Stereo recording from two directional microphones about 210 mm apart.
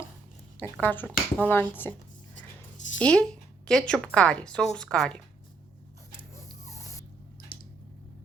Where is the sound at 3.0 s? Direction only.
5° left (ahead or behind).